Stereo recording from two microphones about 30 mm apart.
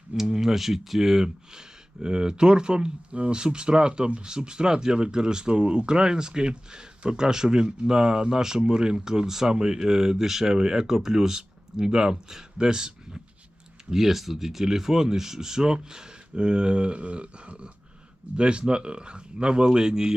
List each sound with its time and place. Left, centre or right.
0.1 s a sound: centre
0.5 s speech: centre
2.0 s speech: right
13.9 s speech: centre